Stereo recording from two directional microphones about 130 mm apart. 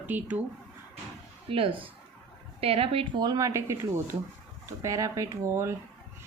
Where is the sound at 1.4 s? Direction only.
45° right (ahead or behind); by 5.7 s 20° right (ahead or behind).